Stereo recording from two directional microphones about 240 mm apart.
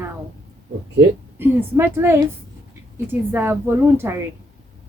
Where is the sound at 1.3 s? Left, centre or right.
Centre.